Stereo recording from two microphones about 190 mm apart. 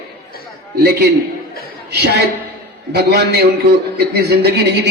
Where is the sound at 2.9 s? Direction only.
60° right (ahead or behind).